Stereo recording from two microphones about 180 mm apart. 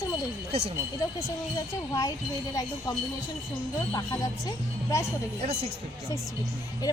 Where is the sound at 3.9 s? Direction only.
20° left (ahead or behind).